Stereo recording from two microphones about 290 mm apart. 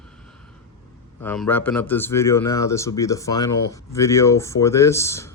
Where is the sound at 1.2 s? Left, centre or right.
Centre.